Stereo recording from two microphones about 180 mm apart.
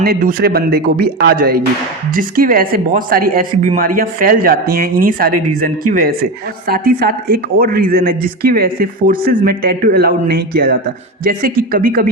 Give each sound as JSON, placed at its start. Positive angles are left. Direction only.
{"t": 0.0, "sound": "speech", "side_deg": -55}